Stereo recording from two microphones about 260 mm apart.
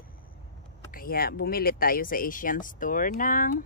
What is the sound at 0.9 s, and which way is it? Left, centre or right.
Speech, left.